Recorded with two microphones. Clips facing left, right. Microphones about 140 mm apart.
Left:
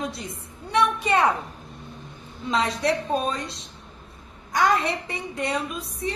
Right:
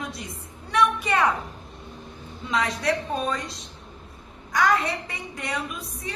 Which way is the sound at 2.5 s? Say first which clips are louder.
Left 2 dB; 25° left (ahead or behind).